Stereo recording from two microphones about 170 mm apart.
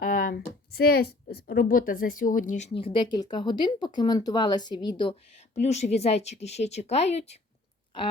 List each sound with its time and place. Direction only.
0.0 s speech: 55° left (ahead or behind); by 5.1 s 25° left (ahead or behind)
5.5 s speech: 40° left (ahead or behind)